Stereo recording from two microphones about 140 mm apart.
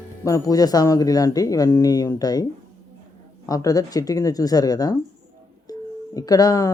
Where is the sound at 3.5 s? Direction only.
25° left (ahead or behind).